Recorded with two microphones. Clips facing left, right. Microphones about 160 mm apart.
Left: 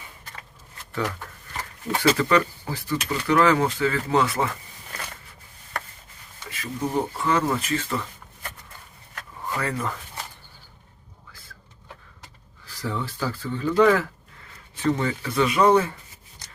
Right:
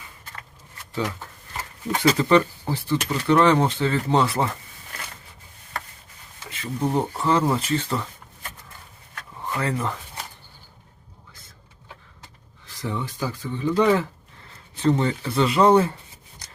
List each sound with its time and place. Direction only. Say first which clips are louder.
1.9 s speech: right 2 dB; 25° right (ahead or behind)
6.5 s speech: right 2 dB; 30° right (ahead or behind)
9.4 s a sound: right 2 dB; 25° right (ahead or behind)
12.7 s speech: even; 20° right (ahead or behind)